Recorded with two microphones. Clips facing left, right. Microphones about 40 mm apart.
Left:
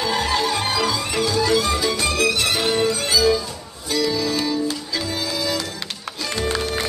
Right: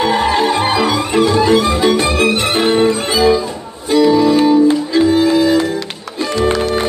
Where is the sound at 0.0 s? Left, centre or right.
Right.